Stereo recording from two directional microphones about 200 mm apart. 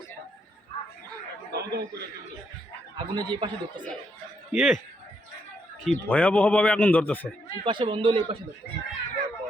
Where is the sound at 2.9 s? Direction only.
20° right (ahead or behind).